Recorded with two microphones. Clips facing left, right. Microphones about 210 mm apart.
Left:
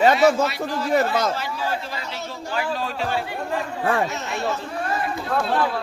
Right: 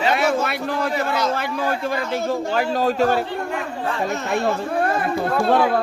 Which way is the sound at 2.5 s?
45° right (ahead or behind).